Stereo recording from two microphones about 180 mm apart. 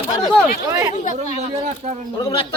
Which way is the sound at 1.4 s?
35° right (ahead or behind).